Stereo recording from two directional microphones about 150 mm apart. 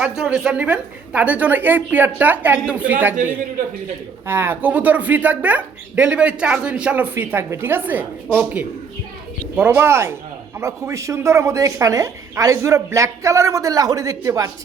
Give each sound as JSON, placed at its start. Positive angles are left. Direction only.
{"t": 0.0, "sound": "speech", "side_deg": -5}
{"t": 4.3, "sound": "a woman's voice", "side_deg": -15}